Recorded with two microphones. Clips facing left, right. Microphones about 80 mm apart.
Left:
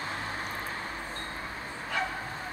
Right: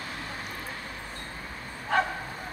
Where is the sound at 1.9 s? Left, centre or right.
Right.